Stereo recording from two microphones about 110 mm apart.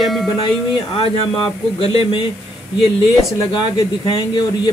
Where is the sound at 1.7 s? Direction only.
50° left (ahead or behind).